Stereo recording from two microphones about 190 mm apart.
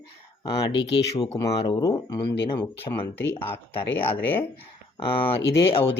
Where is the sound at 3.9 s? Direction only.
10° left (ahead or behind).